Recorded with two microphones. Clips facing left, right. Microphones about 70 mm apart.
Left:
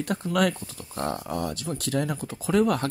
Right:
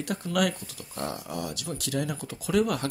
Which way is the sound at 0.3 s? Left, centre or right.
Left.